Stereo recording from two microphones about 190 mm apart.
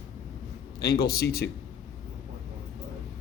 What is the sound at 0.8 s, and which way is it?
Speech, 55° left (ahead or behind).